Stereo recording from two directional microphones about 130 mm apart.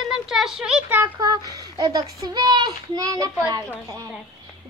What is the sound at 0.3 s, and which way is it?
Speech, 5° right (ahead or behind).